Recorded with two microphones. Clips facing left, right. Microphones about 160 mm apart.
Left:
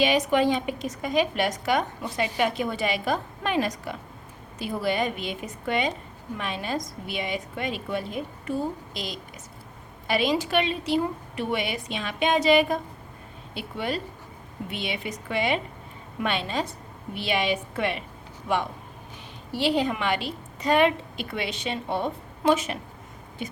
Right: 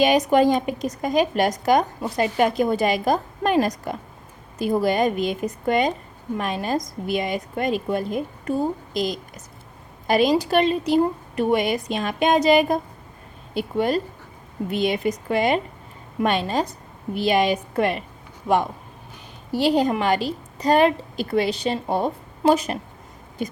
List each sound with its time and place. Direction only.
0.0 s a woman's voice: 45° right (ahead or behind)